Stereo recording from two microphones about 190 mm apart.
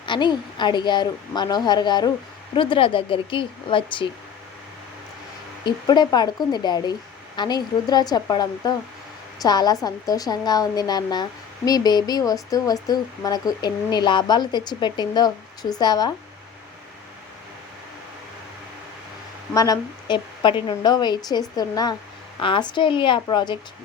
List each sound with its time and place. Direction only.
0.0 s a woman's voice: 25° left (ahead or behind)
5.6 s a woman's voice: 25° left (ahead or behind)
19.5 s a woman's voice: 20° left (ahead or behind)